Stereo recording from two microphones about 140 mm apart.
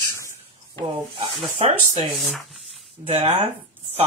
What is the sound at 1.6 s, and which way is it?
Speech, 45° right (ahead or behind).